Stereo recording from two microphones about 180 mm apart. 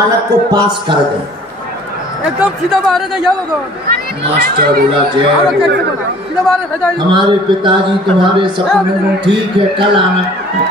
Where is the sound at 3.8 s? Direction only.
55° right (ahead or behind).